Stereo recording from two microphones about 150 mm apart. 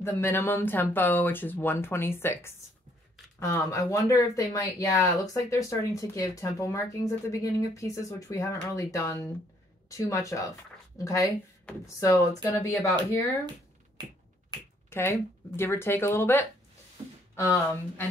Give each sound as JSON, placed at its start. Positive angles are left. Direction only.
{"t": 0.0, "sound": "speech", "side_deg": 15}
{"t": 14.9, "sound": "speech", "side_deg": 15}